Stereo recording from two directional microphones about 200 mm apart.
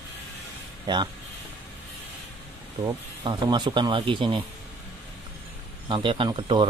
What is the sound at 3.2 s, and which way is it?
Speech, 20° right (ahead or behind).